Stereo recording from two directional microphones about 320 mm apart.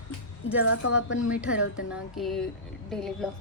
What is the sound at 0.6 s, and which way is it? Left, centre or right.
Speech, left.